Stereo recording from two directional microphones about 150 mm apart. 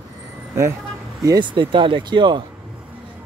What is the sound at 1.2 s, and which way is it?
Speech, 30° right (ahead or behind).